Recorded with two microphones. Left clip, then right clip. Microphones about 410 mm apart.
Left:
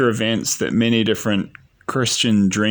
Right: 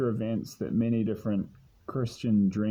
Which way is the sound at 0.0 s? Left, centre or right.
Right.